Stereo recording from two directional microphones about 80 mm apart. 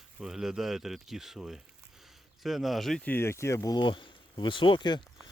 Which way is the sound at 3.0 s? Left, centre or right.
Left.